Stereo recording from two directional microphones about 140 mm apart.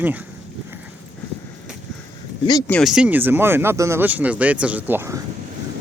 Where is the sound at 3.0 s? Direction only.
15° right (ahead or behind).